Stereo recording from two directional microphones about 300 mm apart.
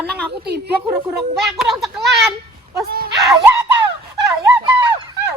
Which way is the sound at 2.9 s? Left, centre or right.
Right.